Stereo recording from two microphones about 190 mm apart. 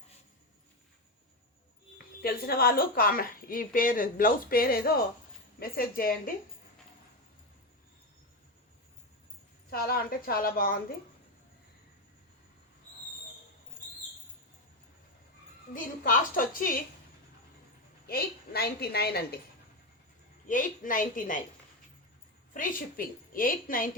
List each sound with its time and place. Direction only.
2.2 s a woman's voice: 50° left (ahead or behind)
9.6 s a woman's voice: 50° left (ahead or behind)
15.7 s a woman's voice: 45° left (ahead or behind)
18.0 s a woman's voice: 55° left (ahead or behind)
20.5 s a woman's voice: 45° left (ahead or behind)
22.5 s a woman's voice: 45° left (ahead or behind)